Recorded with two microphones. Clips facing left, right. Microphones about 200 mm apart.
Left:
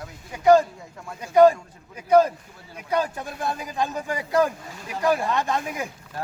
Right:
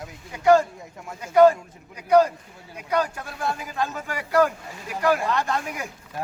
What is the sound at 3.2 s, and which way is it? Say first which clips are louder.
Speech: even; 20° left (ahead or behind).